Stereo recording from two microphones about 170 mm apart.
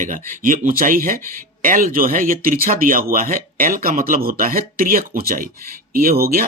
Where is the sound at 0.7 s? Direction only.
55° right (ahead or behind).